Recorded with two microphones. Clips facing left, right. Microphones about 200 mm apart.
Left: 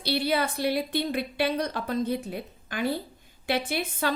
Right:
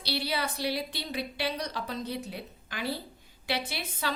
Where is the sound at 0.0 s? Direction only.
50° left (ahead or behind).